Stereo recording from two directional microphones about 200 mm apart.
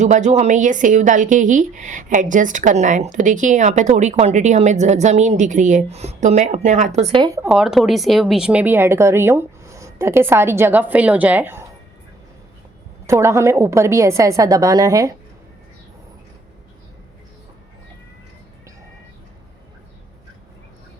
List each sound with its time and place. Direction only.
0.0 s a woman's voice: 35° right (ahead or behind)
7.3 s a woman's voice: 5° right (ahead or behind)
13.1 s a woman's voice: 15° right (ahead or behind)